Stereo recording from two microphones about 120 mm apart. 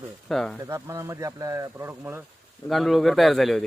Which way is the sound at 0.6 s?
25° right (ahead or behind).